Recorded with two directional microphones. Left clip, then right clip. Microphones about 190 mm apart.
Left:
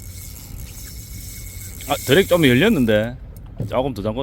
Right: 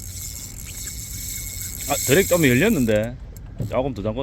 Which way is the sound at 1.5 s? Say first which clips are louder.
Left 2 dB; 10° left (ahead or behind).